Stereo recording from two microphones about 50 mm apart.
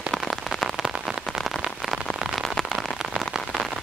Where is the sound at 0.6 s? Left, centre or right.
Centre.